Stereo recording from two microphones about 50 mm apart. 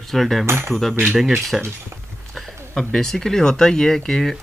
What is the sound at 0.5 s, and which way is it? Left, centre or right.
Speech, right.